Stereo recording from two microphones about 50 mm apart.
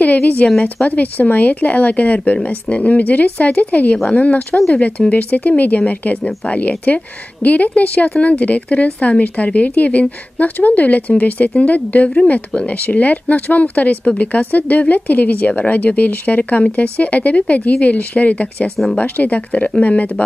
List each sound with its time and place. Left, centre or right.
0.0 s speech: left
6.2 s speech: left
6.9 s speech: left